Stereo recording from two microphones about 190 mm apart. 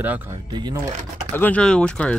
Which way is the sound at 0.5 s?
20° right (ahead or behind).